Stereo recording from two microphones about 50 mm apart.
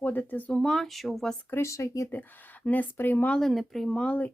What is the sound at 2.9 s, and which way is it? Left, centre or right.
Speech, left.